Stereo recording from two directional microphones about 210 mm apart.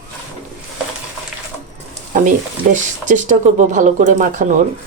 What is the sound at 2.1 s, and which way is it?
Frying, 40° right (ahead or behind).